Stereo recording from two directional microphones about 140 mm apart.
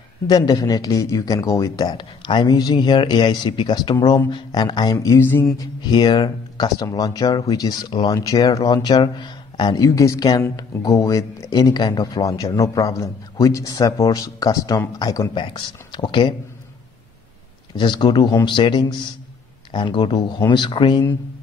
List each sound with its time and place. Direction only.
0.3 s speech: 25° left (ahead or behind)
5.6 s speech: 30° left (ahead or behind)
17.7 s speech: 35° left (ahead or behind)